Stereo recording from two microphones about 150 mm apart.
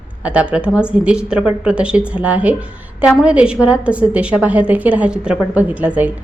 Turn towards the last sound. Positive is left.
turn(degrees=-10)  # may be behind; listen again after turning